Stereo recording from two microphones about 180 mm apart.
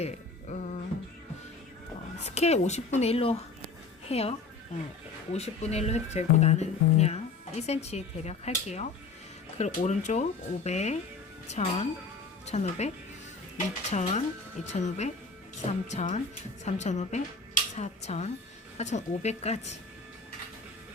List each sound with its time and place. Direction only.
0.0 s a sound: 40° left (ahead or behind)
2.2 s speech: 35° left (ahead or behind)
13.9 s speech: 40° left (ahead or behind)